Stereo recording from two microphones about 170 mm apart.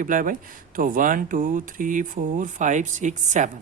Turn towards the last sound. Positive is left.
turn(degrees=-45)  # may be behind; listen again after turning